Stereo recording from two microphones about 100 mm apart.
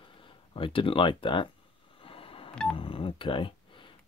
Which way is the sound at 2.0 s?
65° left (ahead or behind).